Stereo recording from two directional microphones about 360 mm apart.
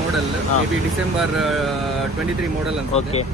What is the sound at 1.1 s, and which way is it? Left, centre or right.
Speech, centre.